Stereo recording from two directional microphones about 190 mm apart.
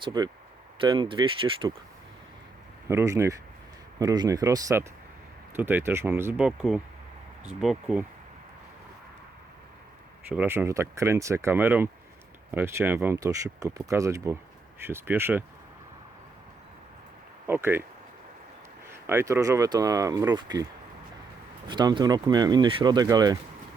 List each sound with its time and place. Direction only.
0.0 s speech: 20° right (ahead or behind)
2.8 s speech: 15° right (ahead or behind)
10.2 s speech: 10° right (ahead or behind)
17.4 s speech: 10° right (ahead or behind)
18.9 s speech: 15° right (ahead or behind)
21.7 s speech: 25° right (ahead or behind)